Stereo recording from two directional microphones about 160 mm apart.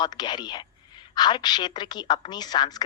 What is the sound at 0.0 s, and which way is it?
A woman's voice, 25° left (ahead or behind).